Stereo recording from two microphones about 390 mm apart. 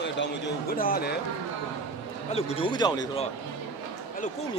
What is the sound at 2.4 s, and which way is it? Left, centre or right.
Speech, centre.